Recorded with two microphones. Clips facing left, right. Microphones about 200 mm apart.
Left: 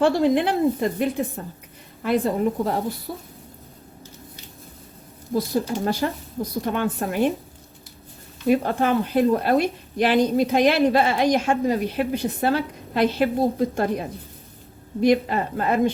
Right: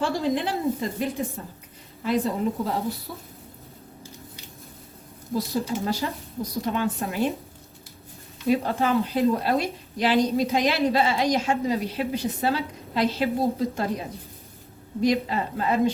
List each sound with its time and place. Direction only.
0.0 s a woman's voice: 60° left (ahead or behind)
5.6 s a woman's voice: 55° left (ahead or behind)
8.4 s a woman's voice: 55° left (ahead or behind)
15.0 s a woman's voice: 55° left (ahead or behind)